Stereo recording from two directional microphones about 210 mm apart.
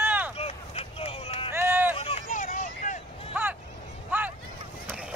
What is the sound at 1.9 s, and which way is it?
Run, 25° left (ahead or behind).